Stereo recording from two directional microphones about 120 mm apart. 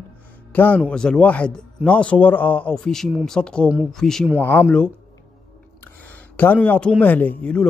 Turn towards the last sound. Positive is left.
turn(degrees=10)  # may be behind; listen again after turning